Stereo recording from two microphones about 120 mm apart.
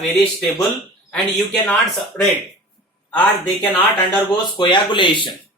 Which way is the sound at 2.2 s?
15° left (ahead or behind).